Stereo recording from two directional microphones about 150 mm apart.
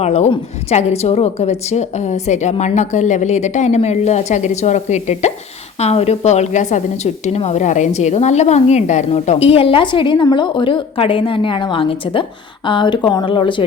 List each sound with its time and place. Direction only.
0.0 s a woman's voice: 45° left (ahead or behind)